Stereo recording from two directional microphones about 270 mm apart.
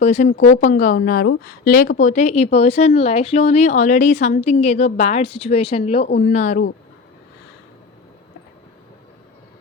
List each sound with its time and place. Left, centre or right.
0.0 s speech: left